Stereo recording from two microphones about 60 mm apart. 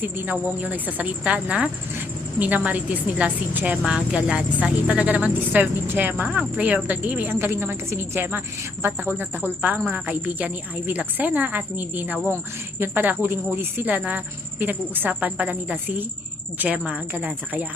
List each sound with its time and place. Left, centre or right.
0.0 s speech: right
3.8 s speech: centre; by 6.2 s right
6.2 s speech: centre; by 7.3 s right
7.3 s a woman's voice: right
13.9 s speech: right